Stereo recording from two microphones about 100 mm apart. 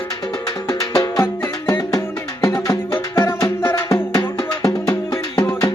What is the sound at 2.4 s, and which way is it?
Music, 35° left (ahead or behind).